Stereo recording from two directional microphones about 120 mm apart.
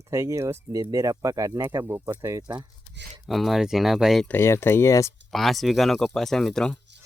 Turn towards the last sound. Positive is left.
turn(degrees=5)  # may be behind; listen again after turning